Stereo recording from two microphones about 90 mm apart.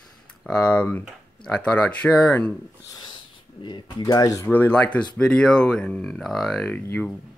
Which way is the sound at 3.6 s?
55° left (ahead or behind).